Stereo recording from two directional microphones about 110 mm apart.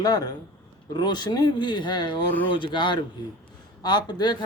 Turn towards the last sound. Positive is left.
turn(degrees=40)  # may be behind; listen again after turning